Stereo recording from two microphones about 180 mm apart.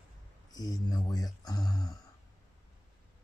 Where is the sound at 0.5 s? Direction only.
20° left (ahead or behind).